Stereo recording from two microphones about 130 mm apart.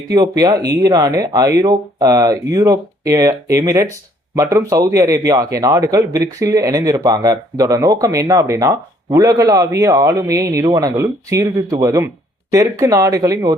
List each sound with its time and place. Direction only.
0.1 s speech: 30° right (ahead or behind)